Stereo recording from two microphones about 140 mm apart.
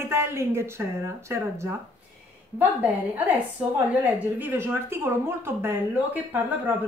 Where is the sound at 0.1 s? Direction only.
20° right (ahead or behind).